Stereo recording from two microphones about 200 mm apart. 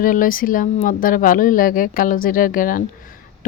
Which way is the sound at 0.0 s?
45° left (ahead or behind).